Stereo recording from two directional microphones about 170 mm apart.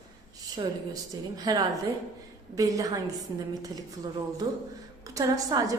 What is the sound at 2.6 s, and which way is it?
Speech, 20° right (ahead or behind).